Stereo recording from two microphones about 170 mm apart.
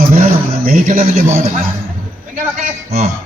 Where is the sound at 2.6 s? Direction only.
55° right (ahead or behind).